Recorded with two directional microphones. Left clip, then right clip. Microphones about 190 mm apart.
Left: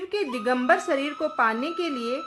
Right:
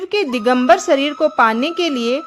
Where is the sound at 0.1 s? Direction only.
50° right (ahead or behind).